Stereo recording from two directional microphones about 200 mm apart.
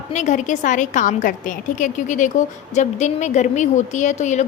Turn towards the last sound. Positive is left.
turn(degrees=35)  # may be behind; listen again after turning